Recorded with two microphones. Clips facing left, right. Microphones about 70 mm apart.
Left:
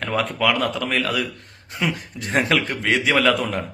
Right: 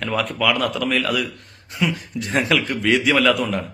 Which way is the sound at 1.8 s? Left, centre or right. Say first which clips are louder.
Right 2 dB; left.